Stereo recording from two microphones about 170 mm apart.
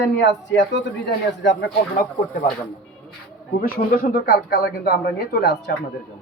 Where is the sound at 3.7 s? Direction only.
60° left (ahead or behind); by 5.7 s 80° left.